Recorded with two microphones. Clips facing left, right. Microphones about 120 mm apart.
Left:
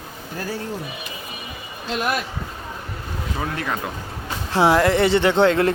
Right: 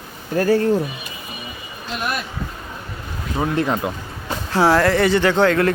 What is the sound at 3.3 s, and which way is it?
Speech, 25° right (ahead or behind).